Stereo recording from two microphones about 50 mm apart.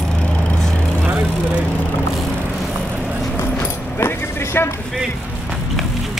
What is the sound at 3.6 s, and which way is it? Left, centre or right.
Dog, left.